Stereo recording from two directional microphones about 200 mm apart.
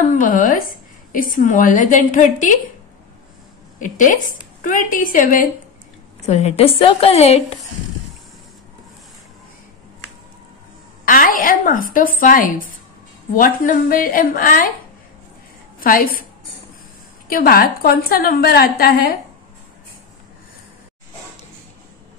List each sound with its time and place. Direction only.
0.1 s a woman's voice: 40° left (ahead or behind)
3.8 s a woman's voice: 40° left (ahead or behind)
11.1 s a woman's voice: 45° left (ahead or behind)
17.3 s a woman's voice: 45° left (ahead or behind)